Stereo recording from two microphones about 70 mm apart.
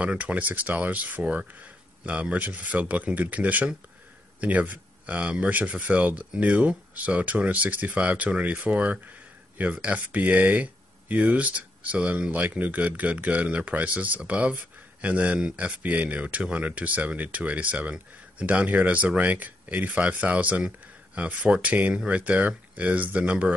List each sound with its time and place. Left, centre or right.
0.0 s speech: right